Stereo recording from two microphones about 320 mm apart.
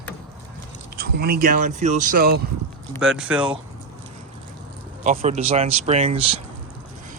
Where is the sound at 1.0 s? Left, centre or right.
Right.